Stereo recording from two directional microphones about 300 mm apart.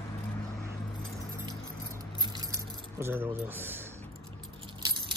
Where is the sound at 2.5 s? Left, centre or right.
Centre.